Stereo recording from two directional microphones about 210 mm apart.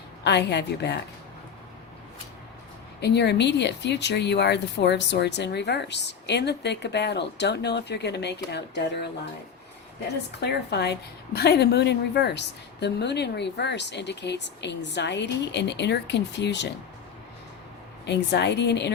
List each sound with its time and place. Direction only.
0.3 s speech: 55° left (ahead or behind)
3.0 s speech: 55° left (ahead or behind)
10.4 s a woman's voice: 50° left (ahead or behind)
18.0 s a woman's voice: 55° left (ahead or behind)